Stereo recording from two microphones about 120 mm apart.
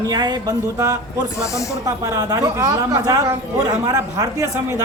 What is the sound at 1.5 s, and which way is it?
Speech, 25° left (ahead or behind).